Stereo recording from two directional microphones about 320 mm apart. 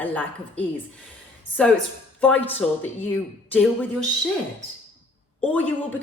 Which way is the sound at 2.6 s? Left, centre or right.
Centre.